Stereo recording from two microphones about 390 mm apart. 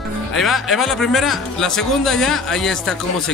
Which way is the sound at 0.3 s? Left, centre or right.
Centre.